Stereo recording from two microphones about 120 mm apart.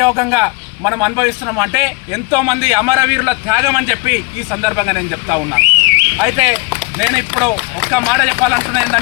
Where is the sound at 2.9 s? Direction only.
20° right (ahead or behind).